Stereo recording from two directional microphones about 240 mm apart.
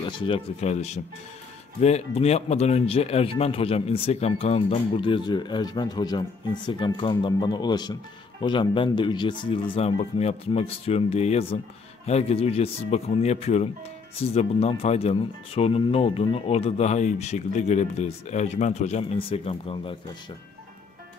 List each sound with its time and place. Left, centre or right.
0.0 s speech: left